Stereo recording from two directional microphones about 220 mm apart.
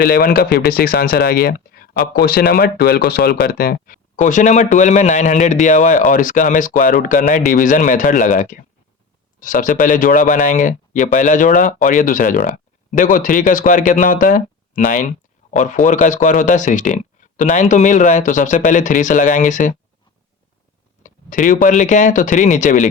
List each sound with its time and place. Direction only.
0.0 s speech: 40° left (ahead or behind)
21.0 s speech: 35° left (ahead or behind)